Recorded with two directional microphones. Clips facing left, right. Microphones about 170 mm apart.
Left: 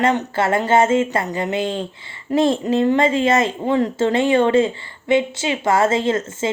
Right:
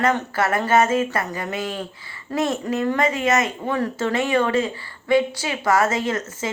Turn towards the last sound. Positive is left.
turn(degrees=25)  # may be behind; listen again after turning